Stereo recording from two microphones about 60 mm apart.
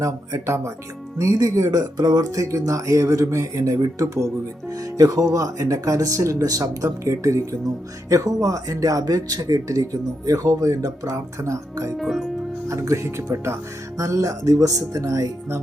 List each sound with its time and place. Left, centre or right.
0.0 s speech: right
1.2 s speech: right
4.9 s speech: right
8.1 s speech: right
11.9 s speech: centre
12.6 s speech: right
14.0 s speech: right